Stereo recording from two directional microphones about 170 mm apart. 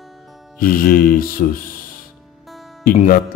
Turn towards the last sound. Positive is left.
turn(degrees=55)  # may be behind; listen again after turning